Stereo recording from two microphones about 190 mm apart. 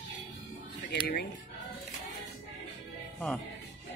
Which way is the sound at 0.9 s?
55° left (ahead or behind).